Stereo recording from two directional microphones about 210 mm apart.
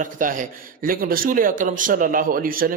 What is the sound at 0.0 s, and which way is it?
Speech, 40° right (ahead or behind).